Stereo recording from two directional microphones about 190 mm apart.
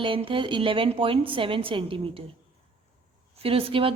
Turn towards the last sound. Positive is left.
turn(degrees=-30)  # may be behind; listen again after turning